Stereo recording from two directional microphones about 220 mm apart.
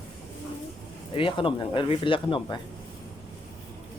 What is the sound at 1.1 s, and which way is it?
Speech, 25° left (ahead or behind).